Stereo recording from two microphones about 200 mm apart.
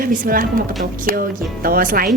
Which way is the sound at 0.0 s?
45° right (ahead or behind).